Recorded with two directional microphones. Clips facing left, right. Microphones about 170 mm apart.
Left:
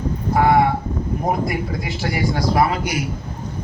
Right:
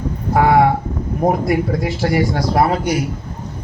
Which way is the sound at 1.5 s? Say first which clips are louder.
Right 7 dB; 55° right (ahead or behind).